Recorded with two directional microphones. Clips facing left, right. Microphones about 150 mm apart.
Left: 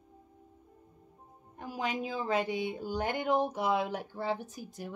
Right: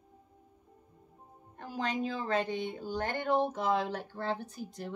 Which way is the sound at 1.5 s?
10° left (ahead or behind).